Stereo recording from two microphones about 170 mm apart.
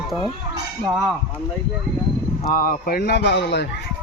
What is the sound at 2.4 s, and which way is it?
Speech, 55° left (ahead or behind).